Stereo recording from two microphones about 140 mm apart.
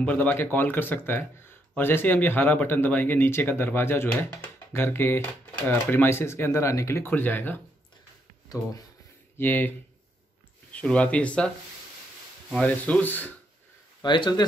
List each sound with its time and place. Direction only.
0.0 s speech: 10° left (ahead or behind)
9.4 s speech: 15° left (ahead or behind)
14.0 s speech: 35° left (ahead or behind)